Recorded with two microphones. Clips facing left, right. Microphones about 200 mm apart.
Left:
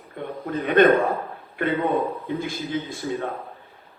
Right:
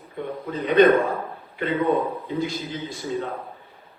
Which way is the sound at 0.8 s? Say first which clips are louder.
Right 1 dB; 50° left (ahead or behind).